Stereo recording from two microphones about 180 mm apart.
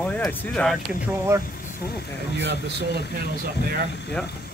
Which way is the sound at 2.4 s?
70° right (ahead or behind).